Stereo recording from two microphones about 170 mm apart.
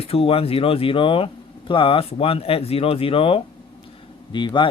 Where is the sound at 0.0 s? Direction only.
35° left (ahead or behind).